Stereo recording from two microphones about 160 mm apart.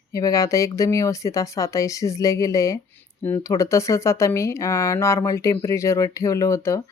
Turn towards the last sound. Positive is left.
turn(degrees=20)  # may be behind; listen again after turning